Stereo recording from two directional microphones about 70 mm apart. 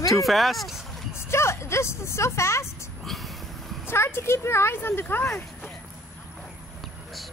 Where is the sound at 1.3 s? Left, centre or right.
Left.